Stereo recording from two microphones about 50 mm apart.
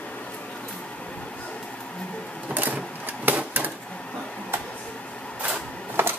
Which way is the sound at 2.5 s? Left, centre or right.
Right.